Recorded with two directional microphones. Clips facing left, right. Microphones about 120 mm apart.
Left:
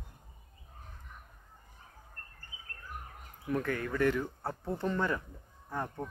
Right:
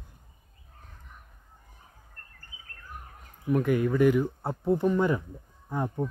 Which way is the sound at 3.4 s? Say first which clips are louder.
Right 8 dB; 15° right (ahead or behind).